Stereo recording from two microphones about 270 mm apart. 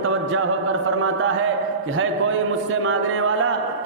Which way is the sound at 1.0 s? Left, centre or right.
Right.